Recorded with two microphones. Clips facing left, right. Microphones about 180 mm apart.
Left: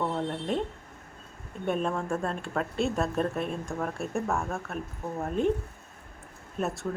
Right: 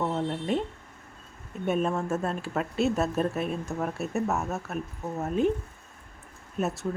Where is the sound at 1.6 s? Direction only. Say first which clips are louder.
Right 2 dB; 5° right (ahead or behind).